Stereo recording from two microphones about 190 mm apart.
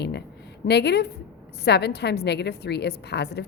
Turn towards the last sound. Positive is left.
turn(degrees=60)  # may be behind; listen again after turning